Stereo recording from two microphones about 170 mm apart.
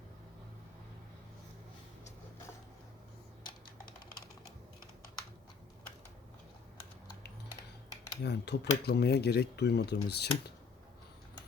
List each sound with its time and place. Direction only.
8.2 s speech: 80° left